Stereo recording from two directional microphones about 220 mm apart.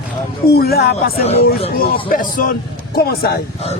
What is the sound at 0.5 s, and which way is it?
Speech, 45° left (ahead or behind).